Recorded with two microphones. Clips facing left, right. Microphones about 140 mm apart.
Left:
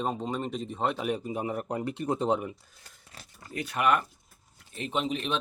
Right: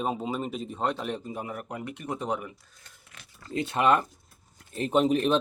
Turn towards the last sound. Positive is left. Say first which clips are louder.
# right 8 dB
turn(degrees=-45)  # may be behind; listen again after turning